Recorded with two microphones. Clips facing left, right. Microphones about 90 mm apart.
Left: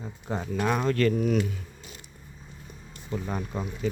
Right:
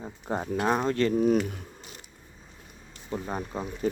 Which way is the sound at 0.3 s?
45° right (ahead or behind).